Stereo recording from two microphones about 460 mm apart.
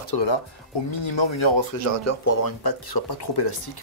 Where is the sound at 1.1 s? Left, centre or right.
Left.